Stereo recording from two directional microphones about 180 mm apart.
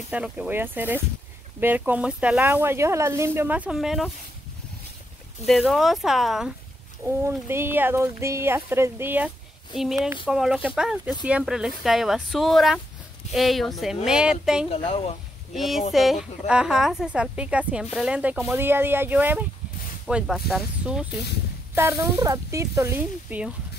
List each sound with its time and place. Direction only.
0.1 s speech: 5° right (ahead or behind)
5.4 s speech: centre (ahead or behind)
7.1 s speech: 15° right (ahead or behind)
14.7 s a woman's voice: 30° left (ahead or behind)
15.5 s speech: centre (ahead or behind)